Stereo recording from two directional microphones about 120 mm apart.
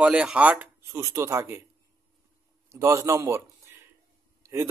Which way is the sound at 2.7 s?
25° right (ahead or behind).